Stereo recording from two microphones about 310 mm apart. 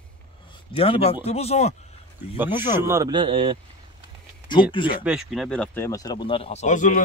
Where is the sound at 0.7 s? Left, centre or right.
Centre.